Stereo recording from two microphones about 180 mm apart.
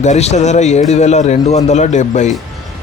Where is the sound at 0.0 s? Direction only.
40° left (ahead or behind).